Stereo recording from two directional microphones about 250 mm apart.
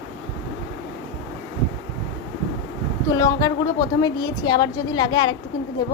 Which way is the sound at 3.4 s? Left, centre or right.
Centre.